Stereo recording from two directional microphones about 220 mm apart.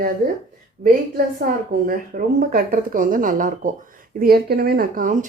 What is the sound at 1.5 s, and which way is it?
Speech, 40° right (ahead or behind).